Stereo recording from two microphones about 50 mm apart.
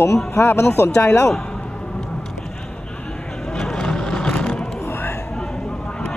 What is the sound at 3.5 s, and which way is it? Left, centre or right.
Vehicle, centre.